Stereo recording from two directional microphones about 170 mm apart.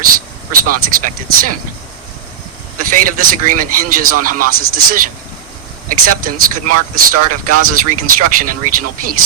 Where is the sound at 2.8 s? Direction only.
50° right (ahead or behind).